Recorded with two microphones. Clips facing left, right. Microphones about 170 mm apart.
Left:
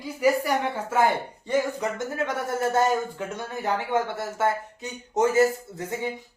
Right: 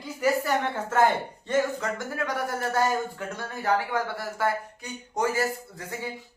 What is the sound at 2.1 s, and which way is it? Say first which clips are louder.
Speech: left 2 dB; 25° left (ahead or behind).